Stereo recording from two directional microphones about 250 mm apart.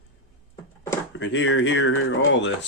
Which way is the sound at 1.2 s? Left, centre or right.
Left.